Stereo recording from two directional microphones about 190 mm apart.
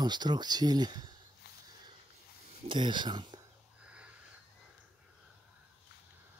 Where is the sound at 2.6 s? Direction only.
25° right (ahead or behind).